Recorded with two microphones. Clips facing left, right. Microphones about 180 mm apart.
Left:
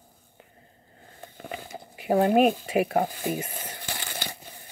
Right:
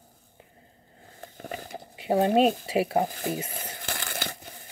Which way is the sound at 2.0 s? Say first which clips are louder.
Left 1 dB; 25° right (ahead or behind).